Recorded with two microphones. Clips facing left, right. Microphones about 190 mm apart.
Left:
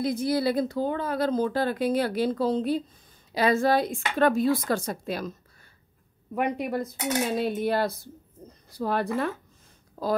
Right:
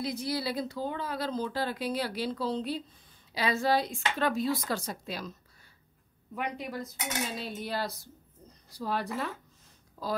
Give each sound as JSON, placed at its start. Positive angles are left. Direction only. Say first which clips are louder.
{"t": 0.0, "sound": "speech", "louder": "left 8 dB", "side_deg": 50}
{"t": 6.3, "sound": "cutlery", "louder": "left 8 dB", "side_deg": 55}
{"t": 10.0, "sound": "speech", "louder": "left 7 dB", "side_deg": 55}